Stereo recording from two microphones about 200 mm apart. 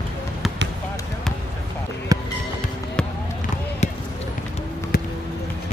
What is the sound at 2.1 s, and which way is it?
Music, 15° right (ahead or behind).